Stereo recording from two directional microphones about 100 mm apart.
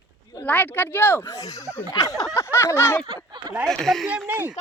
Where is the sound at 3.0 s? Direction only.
45° right (ahead or behind).